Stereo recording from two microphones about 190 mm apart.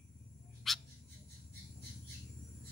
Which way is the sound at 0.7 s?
Centre (ahead or behind).